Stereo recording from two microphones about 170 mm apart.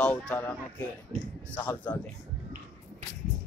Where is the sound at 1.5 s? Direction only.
10° left (ahead or behind).